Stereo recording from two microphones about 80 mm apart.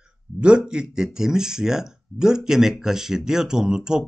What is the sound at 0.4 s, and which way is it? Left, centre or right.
Speech, centre.